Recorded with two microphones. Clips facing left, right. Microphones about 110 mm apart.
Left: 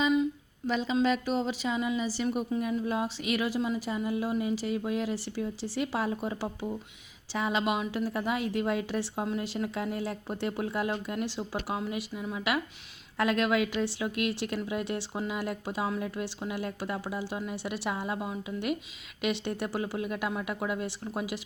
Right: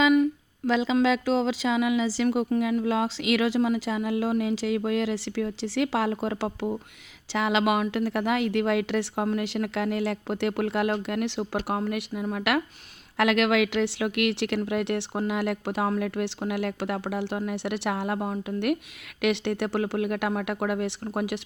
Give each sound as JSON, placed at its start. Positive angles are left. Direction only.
{"t": 0.0, "sound": "a sound", "side_deg": -60}
{"t": 0.7, "sound": "speech", "side_deg": -90}
{"t": 2.5, "sound": "speech", "side_deg": -75}
{"t": 13.1, "sound": "speech", "side_deg": -80}